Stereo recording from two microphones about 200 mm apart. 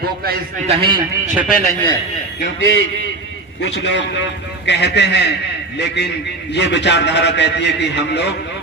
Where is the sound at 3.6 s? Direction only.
60° left (ahead or behind).